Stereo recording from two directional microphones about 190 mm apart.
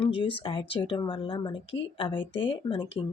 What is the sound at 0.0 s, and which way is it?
Speech, 30° left (ahead or behind).